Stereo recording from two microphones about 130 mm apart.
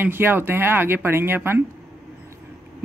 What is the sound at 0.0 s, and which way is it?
A woman's voice, 15° right (ahead or behind).